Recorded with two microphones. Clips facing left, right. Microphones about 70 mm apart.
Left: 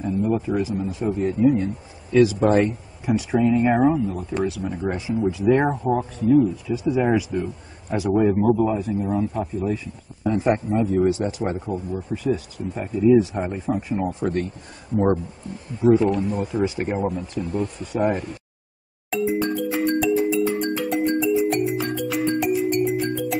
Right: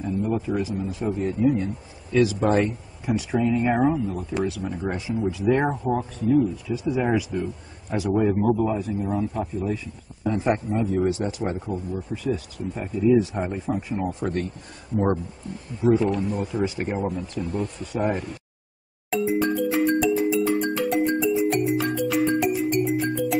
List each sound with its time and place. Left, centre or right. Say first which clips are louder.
0.0 s a man's voice: left 3 dB; centre
6.7 s speech: left 3 dB; centre
7.0 s a man's voice: left 3 dB; centre
15.8 s a man's voice: left 3 dB; centre
19.0 s music: even; centre